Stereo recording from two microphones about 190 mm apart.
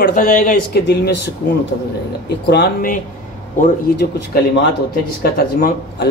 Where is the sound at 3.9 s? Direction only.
60° left (ahead or behind).